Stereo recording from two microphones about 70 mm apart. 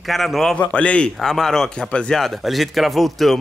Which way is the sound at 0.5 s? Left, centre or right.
Centre.